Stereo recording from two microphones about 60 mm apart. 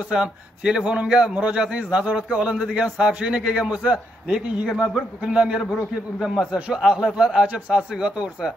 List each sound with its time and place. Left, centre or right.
0.1 s a man's voice: centre
6.1 s a man's voice: centre
7.4 s a man's voice: right